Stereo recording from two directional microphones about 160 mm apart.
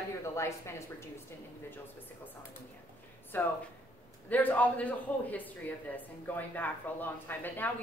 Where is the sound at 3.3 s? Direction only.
10° left (ahead or behind).